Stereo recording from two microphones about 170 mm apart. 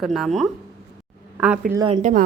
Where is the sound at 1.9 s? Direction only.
45° right (ahead or behind).